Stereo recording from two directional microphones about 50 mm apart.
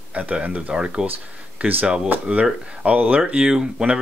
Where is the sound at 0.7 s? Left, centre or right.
Centre.